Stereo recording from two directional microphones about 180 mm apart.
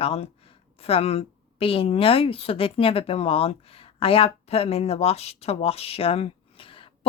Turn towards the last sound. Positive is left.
turn(degrees=30)  # may be behind; listen again after turning